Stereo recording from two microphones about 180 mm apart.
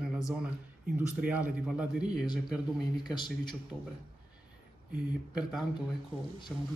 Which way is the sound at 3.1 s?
25° left (ahead or behind).